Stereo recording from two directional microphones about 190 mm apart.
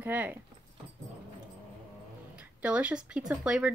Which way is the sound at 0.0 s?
10° right (ahead or behind).